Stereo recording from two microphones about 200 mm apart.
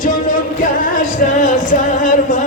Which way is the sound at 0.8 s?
40° left (ahead or behind).